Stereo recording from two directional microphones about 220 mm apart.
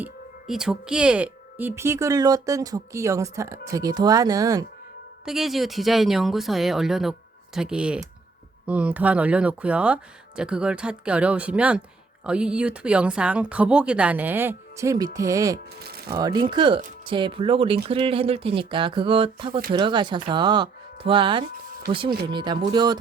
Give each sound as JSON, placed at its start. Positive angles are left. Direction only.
{"t": 0.0, "sound": "speech", "side_deg": 0}
{"t": 5.2, "sound": "speech", "side_deg": 0}
{"t": 15.8, "sound": "speech", "side_deg": -45}
{"t": 16.0, "sound": "speech", "side_deg": -20}